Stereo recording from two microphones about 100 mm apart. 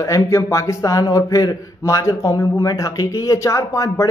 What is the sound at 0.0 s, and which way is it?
A man's voice, 30° left (ahead or behind).